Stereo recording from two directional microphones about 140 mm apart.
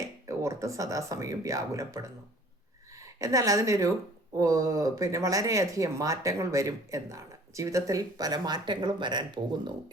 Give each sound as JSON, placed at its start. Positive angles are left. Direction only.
{"t": 0.3, "sound": "a woman's voice", "side_deg": -20}